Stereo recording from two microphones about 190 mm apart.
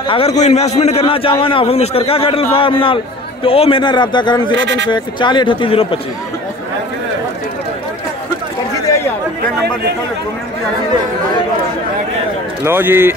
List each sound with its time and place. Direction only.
0.1 s a man's voice: 35° left (ahead or behind)
12.6 s speech: 10° right (ahead or behind)